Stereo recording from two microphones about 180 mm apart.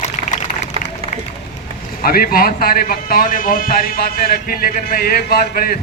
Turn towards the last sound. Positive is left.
turn(degrees=55)  # may be behind; listen again after turning